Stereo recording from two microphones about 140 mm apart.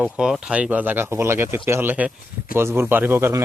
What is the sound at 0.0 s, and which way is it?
Speech, 5° right (ahead or behind).